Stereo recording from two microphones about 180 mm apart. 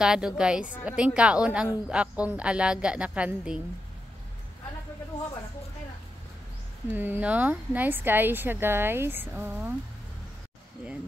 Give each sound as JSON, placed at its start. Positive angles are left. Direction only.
{"t": 0.0, "sound": "a woman's voice", "side_deg": -5}
{"t": 6.9, "sound": "a woman's voice", "side_deg": -10}